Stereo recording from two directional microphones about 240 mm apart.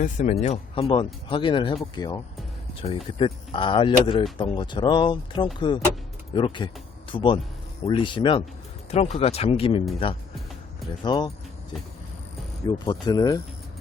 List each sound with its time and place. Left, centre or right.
0.0 s speech: left
12.6 s speech: centre